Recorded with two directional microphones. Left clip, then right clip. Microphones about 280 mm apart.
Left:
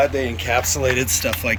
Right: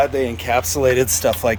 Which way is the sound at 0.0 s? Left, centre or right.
Centre.